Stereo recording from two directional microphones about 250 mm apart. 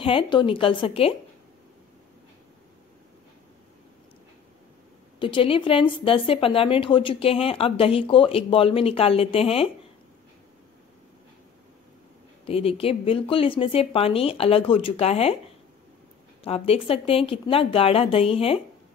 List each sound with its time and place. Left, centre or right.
0.0 s speech: centre
5.2 s speech: left
12.4 s speech: left